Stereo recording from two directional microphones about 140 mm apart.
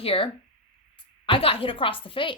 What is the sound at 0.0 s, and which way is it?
Speech, 40° left (ahead or behind).